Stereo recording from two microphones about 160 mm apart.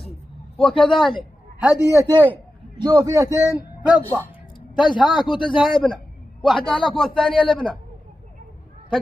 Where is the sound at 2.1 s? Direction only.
10° left (ahead or behind).